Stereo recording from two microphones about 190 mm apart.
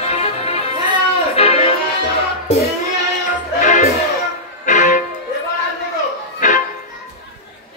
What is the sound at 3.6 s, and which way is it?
Music, 40° left (ahead or behind).